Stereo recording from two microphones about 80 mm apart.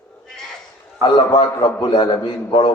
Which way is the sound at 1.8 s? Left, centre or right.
Left.